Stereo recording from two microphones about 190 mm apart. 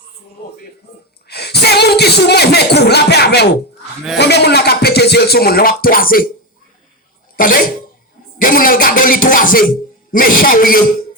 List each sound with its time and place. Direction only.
1.3 s speech: 60° left (ahead or behind)
4.2 s a sound: 60° left (ahead or behind)
7.3 s speech: 50° left (ahead or behind)